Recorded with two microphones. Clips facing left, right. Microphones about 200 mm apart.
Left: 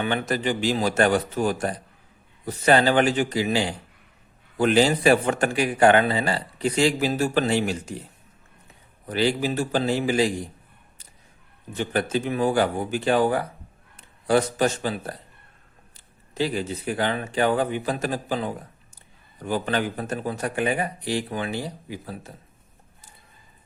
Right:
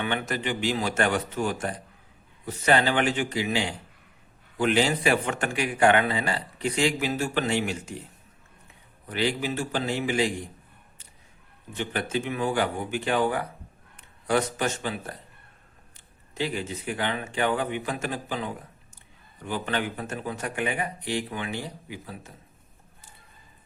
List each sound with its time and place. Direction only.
0.0 s a man's voice: 35° left (ahead or behind)
9.0 s a man's voice: 35° left (ahead or behind)
11.7 s a man's voice: 40° left (ahead or behind)
16.3 s a man's voice: 35° left (ahead or behind)